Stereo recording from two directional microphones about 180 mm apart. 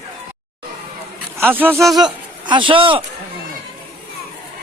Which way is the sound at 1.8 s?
Centre (ahead or behind).